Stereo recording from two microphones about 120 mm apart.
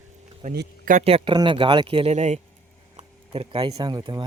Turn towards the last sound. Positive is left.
turn(degrees=-35)  # may be behind; listen again after turning